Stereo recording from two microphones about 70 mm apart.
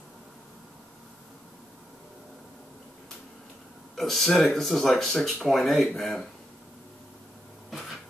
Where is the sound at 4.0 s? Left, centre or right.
Centre.